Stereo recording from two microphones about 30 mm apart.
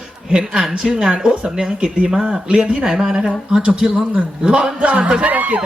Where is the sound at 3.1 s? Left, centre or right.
Right.